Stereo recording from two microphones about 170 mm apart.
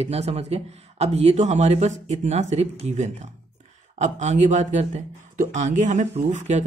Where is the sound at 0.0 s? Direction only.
40° right (ahead or behind).